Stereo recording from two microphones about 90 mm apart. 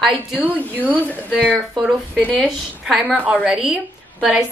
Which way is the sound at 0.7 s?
20° right (ahead or behind).